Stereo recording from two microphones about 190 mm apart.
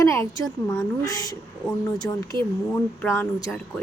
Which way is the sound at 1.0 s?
20° left (ahead or behind).